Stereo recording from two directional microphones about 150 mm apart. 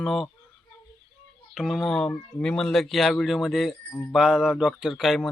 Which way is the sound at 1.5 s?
Centre (ahead or behind).